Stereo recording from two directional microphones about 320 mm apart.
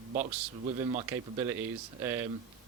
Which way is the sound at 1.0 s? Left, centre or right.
Centre.